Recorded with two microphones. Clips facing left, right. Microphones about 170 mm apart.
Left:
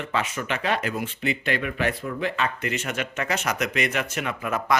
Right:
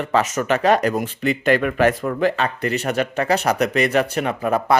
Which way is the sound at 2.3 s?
35° right (ahead or behind).